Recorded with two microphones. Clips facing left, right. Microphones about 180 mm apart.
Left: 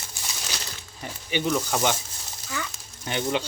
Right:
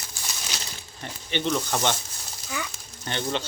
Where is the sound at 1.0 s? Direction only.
10° left (ahead or behind).